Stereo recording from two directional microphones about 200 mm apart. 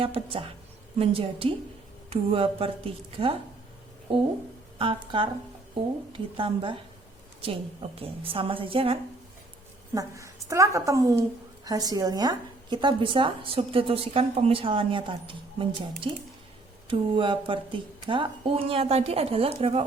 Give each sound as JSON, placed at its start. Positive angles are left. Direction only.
{"t": 0.0, "sound": "speech", "side_deg": -25}
{"t": 9.9, "sound": "a woman's voice", "side_deg": -15}